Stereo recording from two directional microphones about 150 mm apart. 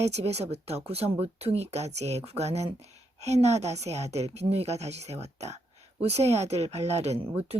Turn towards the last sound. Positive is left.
turn(degrees=-40)  # may be behind; listen again after turning